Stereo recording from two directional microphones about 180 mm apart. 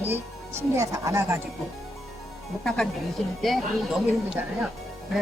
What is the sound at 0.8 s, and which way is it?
Speech, 15° right (ahead or behind).